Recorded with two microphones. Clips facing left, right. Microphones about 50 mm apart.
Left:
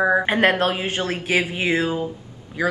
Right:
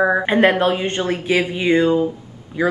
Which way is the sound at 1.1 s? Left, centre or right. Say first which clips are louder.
Right 3 dB; centre.